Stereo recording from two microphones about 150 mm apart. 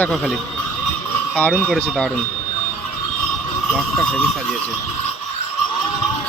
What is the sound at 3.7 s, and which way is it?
Speech, 5° left (ahead or behind).